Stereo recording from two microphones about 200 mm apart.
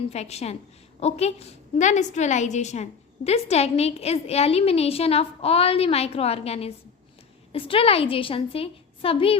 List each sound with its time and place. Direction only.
0.1 s a woman's voice: 30° left (ahead or behind)